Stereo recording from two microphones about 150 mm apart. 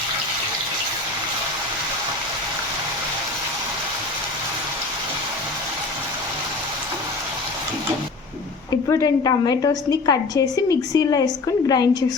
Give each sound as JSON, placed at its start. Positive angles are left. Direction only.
{"t": 8.7, "sound": "a woman's voice", "side_deg": 25}